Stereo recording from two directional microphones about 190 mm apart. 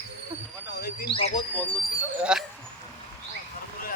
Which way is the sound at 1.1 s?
30° left (ahead or behind).